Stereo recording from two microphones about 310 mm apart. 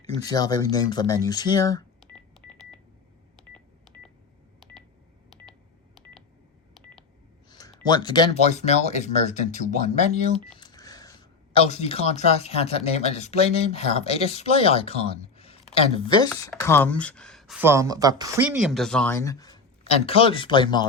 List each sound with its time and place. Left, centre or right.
0.2 s speech: centre
2.0 s telephone dialing: centre
5.3 s telephone dialing: centre
7.5 s speech: centre